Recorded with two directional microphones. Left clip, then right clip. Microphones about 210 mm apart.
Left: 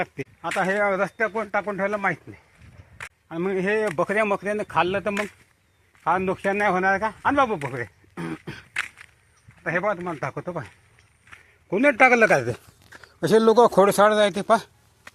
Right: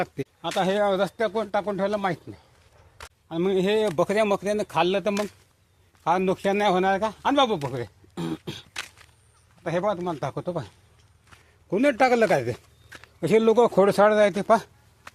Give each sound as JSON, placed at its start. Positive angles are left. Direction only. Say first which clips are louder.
{"t": 0.5, "sound": "speech", "louder": "left 1 dB", "side_deg": 10}
{"t": 3.2, "sound": "speech", "louder": "right 1 dB", "side_deg": 0}
{"t": 7.7, "sound": "a sound", "louder": "left 1 dB", "side_deg": 10}
{"t": 9.6, "sound": "speech", "louder": "left 1 dB", "side_deg": 15}
{"t": 11.7, "sound": "a man's voice", "louder": "left 3 dB", "side_deg": 20}
{"t": 13.1, "sound": "speech", "louder": "left 3 dB", "side_deg": 20}